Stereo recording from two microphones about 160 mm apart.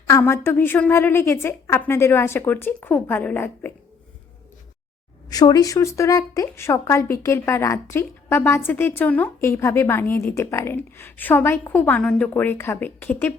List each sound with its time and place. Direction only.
0.1 s speech: 15° left (ahead or behind)
5.3 s speech: 25° left (ahead or behind)